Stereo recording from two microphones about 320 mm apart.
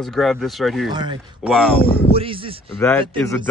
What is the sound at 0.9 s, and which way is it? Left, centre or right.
Speech, centre.